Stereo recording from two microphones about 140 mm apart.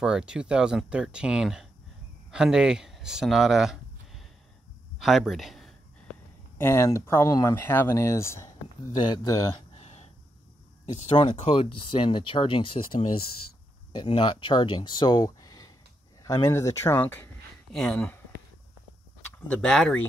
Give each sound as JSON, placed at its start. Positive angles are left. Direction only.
{"t": 0.0, "sound": "speech", "side_deg": -5}
{"t": 6.6, "sound": "speech", "side_deg": 20}
{"t": 9.0, "sound": "speech", "side_deg": 30}
{"t": 9.8, "sound": "throat clearing", "side_deg": 45}
{"t": 10.9, "sound": "speech", "side_deg": 50}
{"t": 19.4, "sound": "speech", "side_deg": 10}